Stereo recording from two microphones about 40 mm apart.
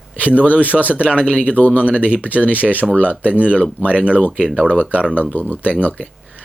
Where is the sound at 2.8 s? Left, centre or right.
Centre.